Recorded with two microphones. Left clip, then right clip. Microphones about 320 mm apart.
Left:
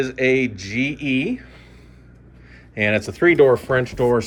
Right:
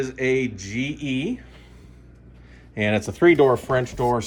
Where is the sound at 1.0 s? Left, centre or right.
Right.